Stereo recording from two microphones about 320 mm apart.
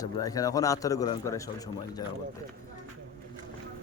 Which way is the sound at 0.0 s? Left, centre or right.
Centre.